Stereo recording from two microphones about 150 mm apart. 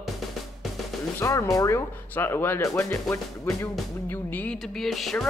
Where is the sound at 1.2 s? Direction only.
20° left (ahead or behind).